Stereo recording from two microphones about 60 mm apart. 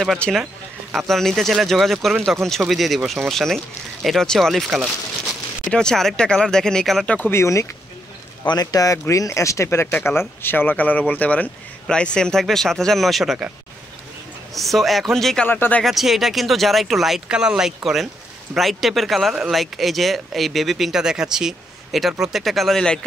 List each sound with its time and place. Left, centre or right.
0.2 s speech: centre
0.9 s speech: centre
5.7 s speech: centre
7.2 s speech: left
8.5 s speech: left
9.1 s speech: left
11.9 s speech: centre
14.5 s speech: centre
15.4 s speech: left
15.8 s speech: centre
17.3 s speech: centre